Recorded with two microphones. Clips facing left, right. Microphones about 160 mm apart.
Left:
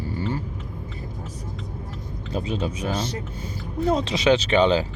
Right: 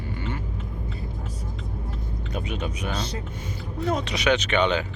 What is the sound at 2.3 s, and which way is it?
Speech, 30° left (ahead or behind).